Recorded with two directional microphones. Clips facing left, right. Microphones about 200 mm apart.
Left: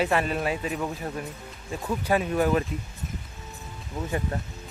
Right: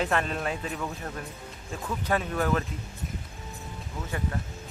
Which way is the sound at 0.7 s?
20° left (ahead or behind).